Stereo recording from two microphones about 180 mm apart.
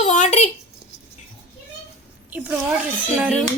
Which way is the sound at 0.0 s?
40° left (ahead or behind).